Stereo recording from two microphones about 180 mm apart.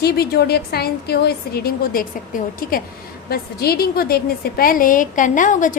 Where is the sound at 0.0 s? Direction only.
60° left (ahead or behind).